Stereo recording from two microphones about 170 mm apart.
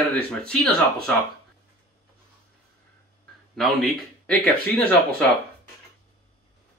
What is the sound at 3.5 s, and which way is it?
Speech, centre (ahead or behind).